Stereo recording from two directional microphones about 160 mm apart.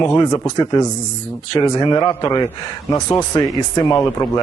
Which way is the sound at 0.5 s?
25° left (ahead or behind).